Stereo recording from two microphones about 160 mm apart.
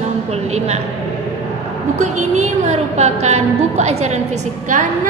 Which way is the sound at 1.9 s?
50° right (ahead or behind).